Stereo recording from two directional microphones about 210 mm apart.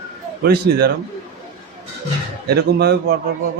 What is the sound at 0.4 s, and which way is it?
Speech, 50° right (ahead or behind).